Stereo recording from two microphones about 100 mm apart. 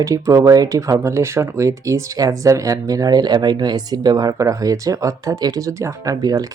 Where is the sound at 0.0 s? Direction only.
30° right (ahead or behind).